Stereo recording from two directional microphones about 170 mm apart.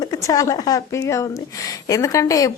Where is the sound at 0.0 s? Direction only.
20° left (ahead or behind).